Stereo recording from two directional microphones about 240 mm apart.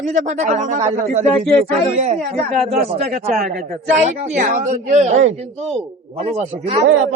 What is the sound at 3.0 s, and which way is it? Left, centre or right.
A man's voice, right.